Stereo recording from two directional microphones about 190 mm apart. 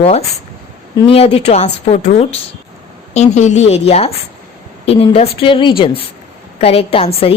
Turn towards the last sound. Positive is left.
turn(degrees=30)  # may be behind; listen again after turning